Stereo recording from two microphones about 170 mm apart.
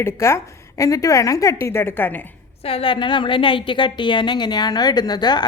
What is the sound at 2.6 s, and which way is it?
A woman's voice, 35° left (ahead or behind).